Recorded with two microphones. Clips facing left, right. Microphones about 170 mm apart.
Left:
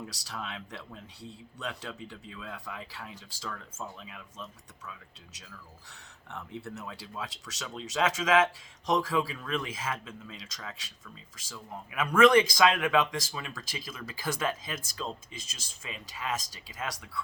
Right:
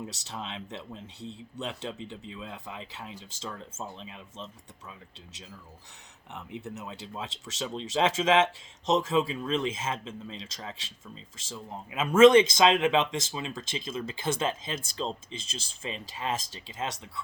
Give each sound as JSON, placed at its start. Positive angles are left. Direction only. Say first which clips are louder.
{"t": 0.0, "sound": "speech", "louder": "right 2 dB", "side_deg": -25}
{"t": 6.3, "sound": "speech", "louder": "right 1 dB", "side_deg": -20}